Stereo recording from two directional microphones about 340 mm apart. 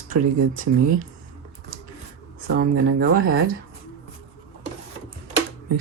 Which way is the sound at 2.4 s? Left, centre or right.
Right.